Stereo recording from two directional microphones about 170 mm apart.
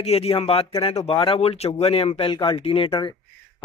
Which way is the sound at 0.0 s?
40° left (ahead or behind).